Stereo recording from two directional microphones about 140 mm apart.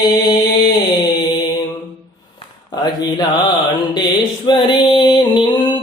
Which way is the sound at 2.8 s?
30° left (ahead or behind).